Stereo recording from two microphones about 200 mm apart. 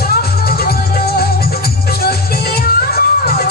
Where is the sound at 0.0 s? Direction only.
50° left (ahead or behind).